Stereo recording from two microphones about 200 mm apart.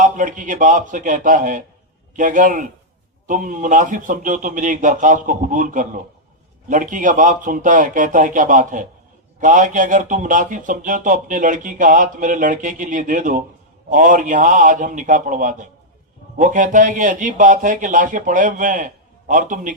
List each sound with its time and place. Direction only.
0.0 s speech: 40° right (ahead or behind)